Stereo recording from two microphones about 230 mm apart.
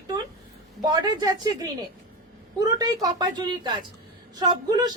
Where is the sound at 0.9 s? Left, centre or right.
Centre.